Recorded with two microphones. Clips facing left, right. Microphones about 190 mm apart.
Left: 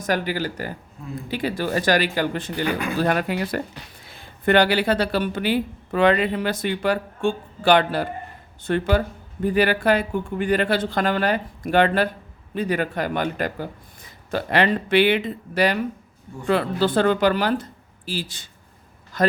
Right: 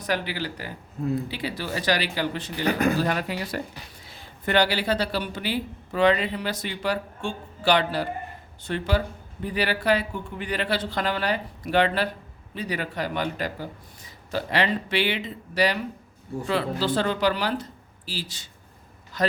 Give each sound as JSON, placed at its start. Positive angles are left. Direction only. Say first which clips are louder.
{"t": 0.0, "sound": "speech", "louder": "left 4 dB", "side_deg": 45}
{"t": 2.6, "sound": "speech", "louder": "right 5 dB", "side_deg": -40}
{"t": 3.0, "sound": "speech", "louder": "left 4 dB", "side_deg": 55}